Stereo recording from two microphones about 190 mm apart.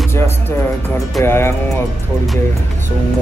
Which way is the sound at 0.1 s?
10° left (ahead or behind).